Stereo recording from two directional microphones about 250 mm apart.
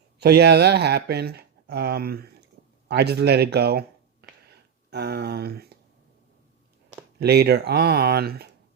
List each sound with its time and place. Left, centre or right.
0.2 s speech: right
7.2 s speech: right